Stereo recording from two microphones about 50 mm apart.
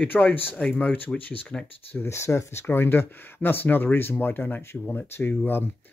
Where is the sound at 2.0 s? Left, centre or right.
Left.